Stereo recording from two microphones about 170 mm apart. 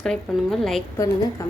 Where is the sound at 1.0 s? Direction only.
15° left (ahead or behind).